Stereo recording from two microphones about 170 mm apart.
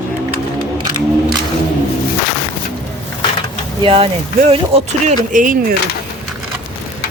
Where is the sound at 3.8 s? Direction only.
35° right (ahead or behind).